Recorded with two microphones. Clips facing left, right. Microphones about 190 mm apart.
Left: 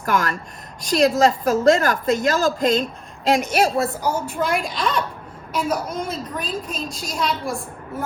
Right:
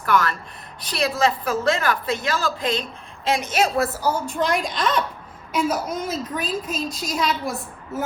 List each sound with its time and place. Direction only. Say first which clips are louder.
0.0 s a woman's voice: even; 45° left (ahead or behind)
3.8 s a woman's voice: even; centre (ahead or behind)